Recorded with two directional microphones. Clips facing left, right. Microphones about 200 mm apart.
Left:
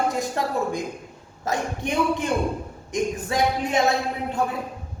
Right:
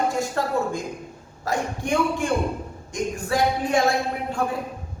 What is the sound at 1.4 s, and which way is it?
A man's voice, 20° left (ahead or behind).